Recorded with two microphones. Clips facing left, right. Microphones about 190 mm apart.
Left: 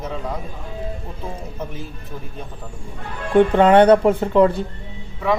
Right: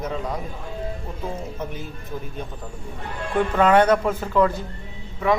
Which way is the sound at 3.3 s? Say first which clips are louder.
Left 5 dB; 30° left (ahead or behind).